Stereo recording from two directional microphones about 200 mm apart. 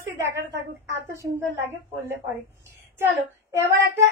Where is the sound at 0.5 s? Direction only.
65° right (ahead or behind).